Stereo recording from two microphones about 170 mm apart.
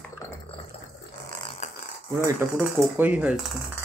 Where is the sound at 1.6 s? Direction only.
45° left (ahead or behind).